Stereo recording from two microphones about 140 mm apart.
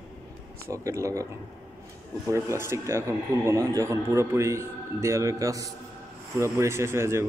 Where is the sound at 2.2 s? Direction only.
20° right (ahead or behind).